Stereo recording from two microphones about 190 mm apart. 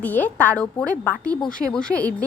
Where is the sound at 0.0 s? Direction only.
10° left (ahead or behind).